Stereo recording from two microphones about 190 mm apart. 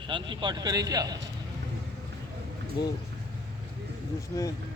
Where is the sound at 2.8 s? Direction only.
25° left (ahead or behind).